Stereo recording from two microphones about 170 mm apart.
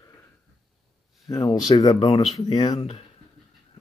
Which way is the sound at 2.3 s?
25° left (ahead or behind).